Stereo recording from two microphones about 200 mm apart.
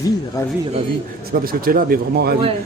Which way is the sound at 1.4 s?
45° right (ahead or behind).